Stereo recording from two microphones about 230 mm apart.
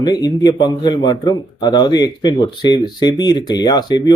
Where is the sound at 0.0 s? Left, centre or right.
Centre.